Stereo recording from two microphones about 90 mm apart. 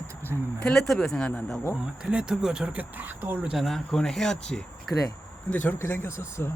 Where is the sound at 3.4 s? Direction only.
Centre (ahead or behind).